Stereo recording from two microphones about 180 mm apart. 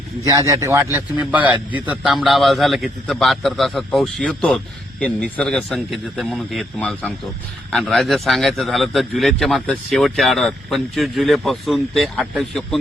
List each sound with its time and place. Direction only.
0.3 s a man's voice: 20° right (ahead or behind); by 12.8 s centre (ahead or behind)